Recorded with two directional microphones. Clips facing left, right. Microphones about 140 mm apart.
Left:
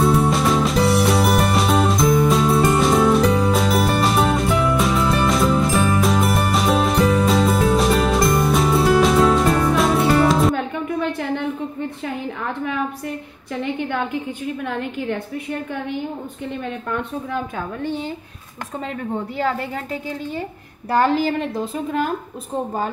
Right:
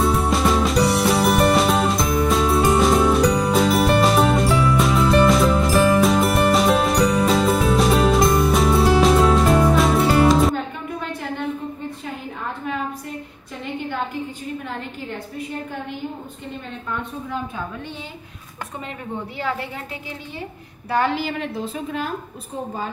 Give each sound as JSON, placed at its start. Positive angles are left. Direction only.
{"t": 0.0, "sound": "music", "side_deg": 0}
{"t": 20.9, "sound": "a woman's voice", "side_deg": 40}